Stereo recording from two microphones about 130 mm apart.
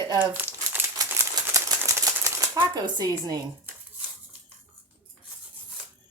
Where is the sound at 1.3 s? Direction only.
25° right (ahead or behind).